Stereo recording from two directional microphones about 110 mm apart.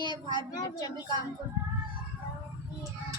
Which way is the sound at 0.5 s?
40° left (ahead or behind).